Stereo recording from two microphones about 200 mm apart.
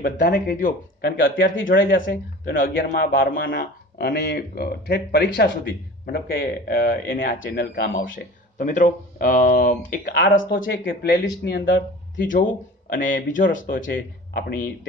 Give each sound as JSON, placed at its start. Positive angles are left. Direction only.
{"t": 0.0, "sound": "a man's voice", "side_deg": 45}
{"t": 1.4, "sound": "speech", "side_deg": 75}
{"t": 2.6, "sound": "a man's voice", "side_deg": 50}
{"t": 8.0, "sound": "speech", "side_deg": 70}
{"t": 8.5, "sound": "a man's voice", "side_deg": 40}
{"t": 10.5, "sound": "speech", "side_deg": 70}
{"t": 10.8, "sound": "speech", "side_deg": 50}
{"t": 12.2, "sound": "a man's voice", "side_deg": 45}